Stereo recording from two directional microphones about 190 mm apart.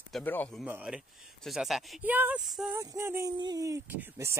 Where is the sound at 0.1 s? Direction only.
10° left (ahead or behind).